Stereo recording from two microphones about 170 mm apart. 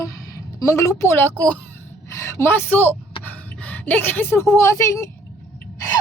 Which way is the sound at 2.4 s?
10° left (ahead or behind).